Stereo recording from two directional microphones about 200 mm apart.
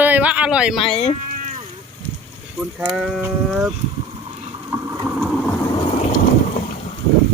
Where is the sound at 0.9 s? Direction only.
30° left (ahead or behind).